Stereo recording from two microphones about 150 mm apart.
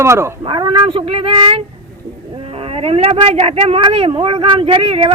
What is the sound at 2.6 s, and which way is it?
Speech, 40° right (ahead or behind).